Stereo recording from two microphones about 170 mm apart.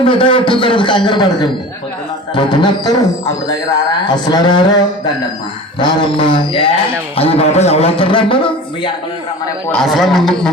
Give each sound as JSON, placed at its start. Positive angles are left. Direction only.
{"t": 0.0, "sound": "a man's voice", "side_deg": 30}
{"t": 4.0, "sound": "a man's voice", "side_deg": 25}
{"t": 5.8, "sound": "a man's voice", "side_deg": 30}
{"t": 9.8, "sound": "a man's voice", "side_deg": 0}